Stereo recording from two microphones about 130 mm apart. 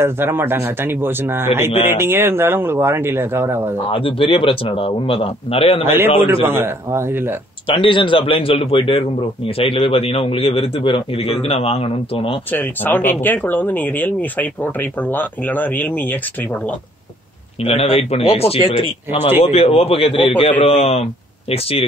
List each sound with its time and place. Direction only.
0.0 s speech: 15° right (ahead or behind)
3.9 s a man's voice: 45° left (ahead or behind)
5.9 s speech: 15° right (ahead or behind)
7.6 s a man's voice: 40° left (ahead or behind)
12.4 s speech: 15° left (ahead or behind)
17.6 s a man's voice: 45° left (ahead or behind)
20.5 s a man's voice: 55° left (ahead or behind)